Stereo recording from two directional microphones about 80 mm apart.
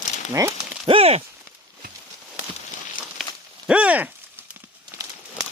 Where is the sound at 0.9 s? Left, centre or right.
Right.